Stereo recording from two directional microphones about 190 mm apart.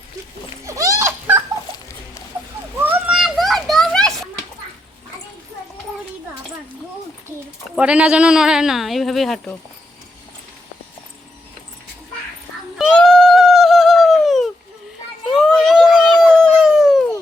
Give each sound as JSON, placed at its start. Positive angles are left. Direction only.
{"t": 0.6, "sound": "dog", "side_deg": -15}
{"t": 2.8, "sound": "children playing", "side_deg": -5}
{"t": 7.8, "sound": "speech", "side_deg": -5}
{"t": 12.8, "sound": "a sound", "side_deg": 5}